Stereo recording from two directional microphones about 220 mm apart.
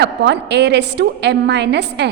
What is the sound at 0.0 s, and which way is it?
A woman's voice, 50° right (ahead or behind).